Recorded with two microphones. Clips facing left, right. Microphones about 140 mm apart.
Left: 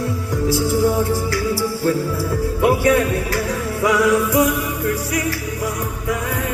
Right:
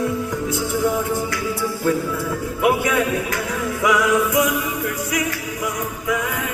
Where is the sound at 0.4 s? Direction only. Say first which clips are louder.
Left 6 dB; 35° left (ahead or behind).